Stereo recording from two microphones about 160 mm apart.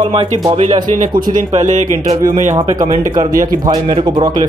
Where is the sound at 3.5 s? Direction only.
25° right (ahead or behind).